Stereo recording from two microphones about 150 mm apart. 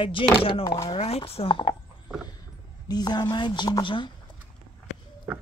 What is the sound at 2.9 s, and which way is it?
Speech, 25° left (ahead or behind).